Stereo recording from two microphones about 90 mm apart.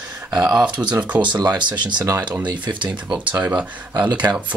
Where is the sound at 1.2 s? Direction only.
50° right (ahead or behind).